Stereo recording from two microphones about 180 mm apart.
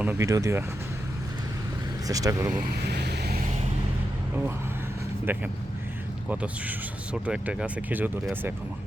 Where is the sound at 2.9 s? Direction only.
65° right (ahead or behind).